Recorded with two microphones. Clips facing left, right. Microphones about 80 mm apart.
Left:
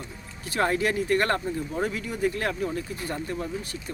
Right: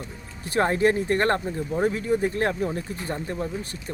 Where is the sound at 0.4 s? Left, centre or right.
Right.